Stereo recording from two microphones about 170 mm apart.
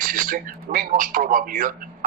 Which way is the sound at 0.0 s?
55° right (ahead or behind).